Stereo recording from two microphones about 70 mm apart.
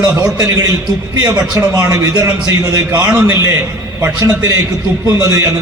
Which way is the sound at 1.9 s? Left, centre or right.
Right.